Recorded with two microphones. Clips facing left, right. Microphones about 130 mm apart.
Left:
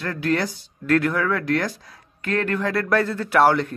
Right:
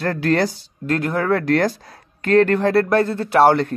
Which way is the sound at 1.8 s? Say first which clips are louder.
Right 7 dB; 50° right (ahead or behind).